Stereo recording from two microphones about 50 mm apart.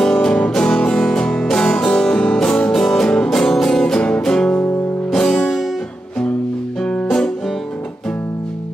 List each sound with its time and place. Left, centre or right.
0.0 s music: centre
6.8 s music: left